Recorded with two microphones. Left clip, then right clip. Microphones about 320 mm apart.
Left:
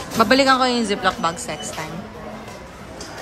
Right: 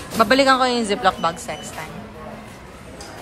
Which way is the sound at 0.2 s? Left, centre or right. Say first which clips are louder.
Even; centre.